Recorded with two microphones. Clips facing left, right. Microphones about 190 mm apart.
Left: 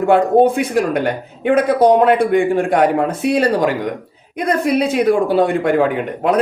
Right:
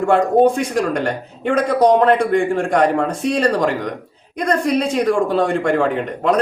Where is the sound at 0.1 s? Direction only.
5° left (ahead or behind).